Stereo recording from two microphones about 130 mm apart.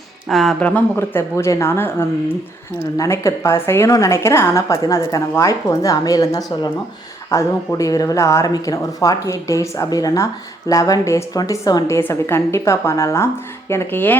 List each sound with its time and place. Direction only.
0.3 s speech: centre (ahead or behind)
0.6 s a woman's voice: 15° left (ahead or behind)